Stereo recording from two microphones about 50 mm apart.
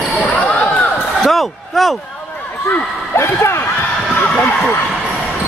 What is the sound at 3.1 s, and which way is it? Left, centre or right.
Speech, left.